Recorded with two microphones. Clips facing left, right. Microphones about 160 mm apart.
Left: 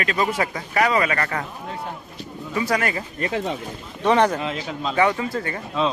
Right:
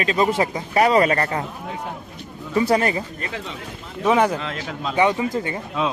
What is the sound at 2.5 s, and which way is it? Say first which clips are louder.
Speech: right 4 dB; 30° right (ahead or behind).